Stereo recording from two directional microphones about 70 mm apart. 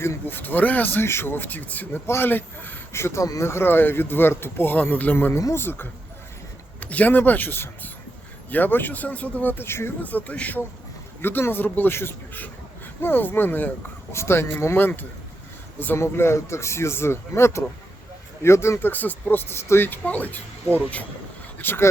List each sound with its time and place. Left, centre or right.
0.0 s speech: left
10.0 s speech: left
11.2 s speech: left
18.9 s speech: left
21.6 s speech: left